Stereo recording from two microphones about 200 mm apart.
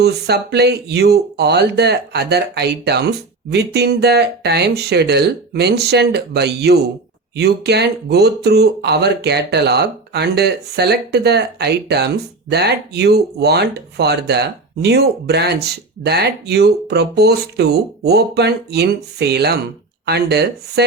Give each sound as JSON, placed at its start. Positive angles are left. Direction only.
{"t": 0.0, "sound": "speech", "side_deg": -55}